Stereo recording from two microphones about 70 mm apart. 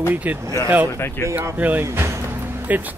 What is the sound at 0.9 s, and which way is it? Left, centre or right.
Speech, left.